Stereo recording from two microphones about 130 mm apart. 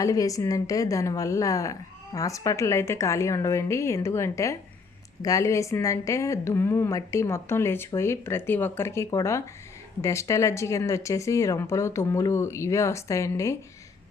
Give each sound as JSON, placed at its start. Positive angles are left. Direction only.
{"t": 0.0, "sound": "a woman's voice", "side_deg": 25}